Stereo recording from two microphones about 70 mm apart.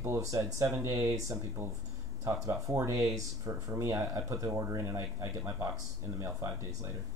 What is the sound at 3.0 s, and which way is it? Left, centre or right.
Speech, centre.